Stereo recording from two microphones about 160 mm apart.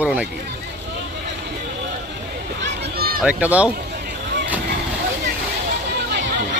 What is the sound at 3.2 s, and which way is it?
Speech, 10° right (ahead or behind).